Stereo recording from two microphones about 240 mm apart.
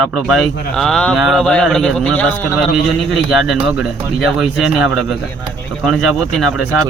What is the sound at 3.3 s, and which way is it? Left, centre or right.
Speech, centre.